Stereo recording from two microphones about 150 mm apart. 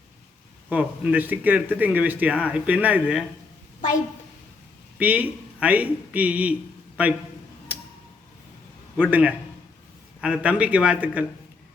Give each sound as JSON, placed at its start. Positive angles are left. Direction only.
{"t": 0.7, "sound": "speech", "side_deg": -10}
{"t": 3.8, "sound": "a woman's voice", "side_deg": 60}
{"t": 4.9, "sound": "speech", "side_deg": -10}
{"t": 7.7, "sound": "tick-tock", "side_deg": -10}
{"t": 9.0, "sound": "speech", "side_deg": -10}